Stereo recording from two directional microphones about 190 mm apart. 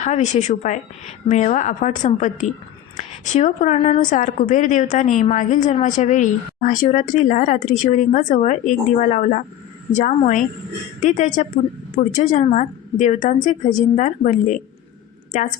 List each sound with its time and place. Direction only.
0.0 s a woman's voice: 35° left (ahead or behind)